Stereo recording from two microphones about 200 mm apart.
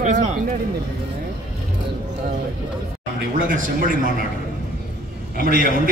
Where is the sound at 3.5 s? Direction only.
45° right (ahead or behind).